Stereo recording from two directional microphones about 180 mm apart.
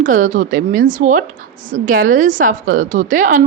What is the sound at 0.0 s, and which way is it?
A woman's voice, 45° right (ahead or behind).